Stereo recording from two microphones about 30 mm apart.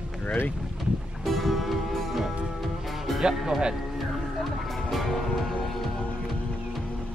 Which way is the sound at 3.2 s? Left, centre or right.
Right.